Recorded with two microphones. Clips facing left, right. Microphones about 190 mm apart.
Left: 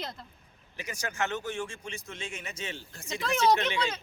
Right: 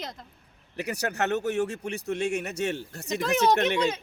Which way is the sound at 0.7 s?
65° right (ahead or behind).